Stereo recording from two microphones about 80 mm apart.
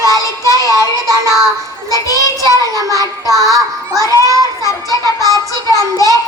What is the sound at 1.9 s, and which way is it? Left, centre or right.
Child singing, left.